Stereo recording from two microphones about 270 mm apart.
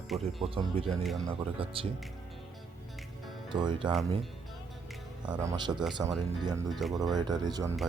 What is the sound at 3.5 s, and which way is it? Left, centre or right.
Speech, centre.